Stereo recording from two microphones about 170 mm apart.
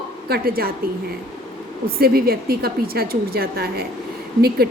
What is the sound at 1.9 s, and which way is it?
A woman's voice, 65° right (ahead or behind).